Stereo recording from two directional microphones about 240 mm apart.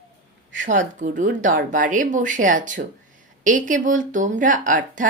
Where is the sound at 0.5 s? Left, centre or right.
Right.